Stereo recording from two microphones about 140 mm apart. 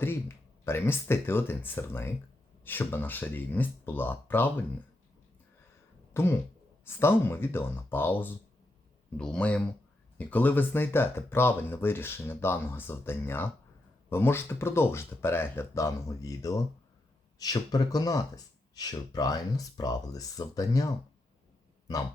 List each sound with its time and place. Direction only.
0.0 s speech: 15° left (ahead or behind)
6.1 s speech: 20° left (ahead or behind)